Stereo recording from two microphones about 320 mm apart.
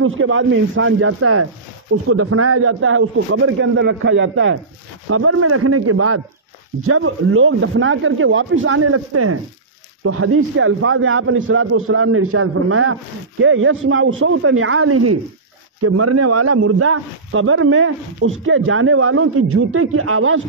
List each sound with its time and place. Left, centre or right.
0.0 s a man's voice: right